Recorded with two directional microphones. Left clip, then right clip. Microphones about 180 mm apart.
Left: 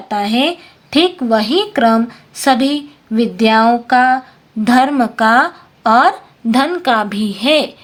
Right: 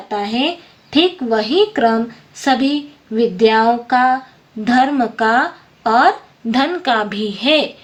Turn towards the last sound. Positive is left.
turn(degrees=35)  # may be behind; listen again after turning